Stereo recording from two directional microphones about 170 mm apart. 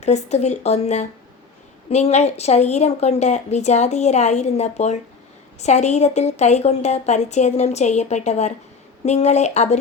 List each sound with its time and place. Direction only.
0.0 s a woman's voice: 40° left (ahead or behind)